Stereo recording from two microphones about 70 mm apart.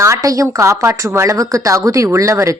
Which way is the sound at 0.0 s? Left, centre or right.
Right.